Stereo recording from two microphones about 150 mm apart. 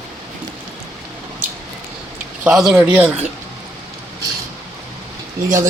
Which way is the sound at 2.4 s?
5° right (ahead or behind).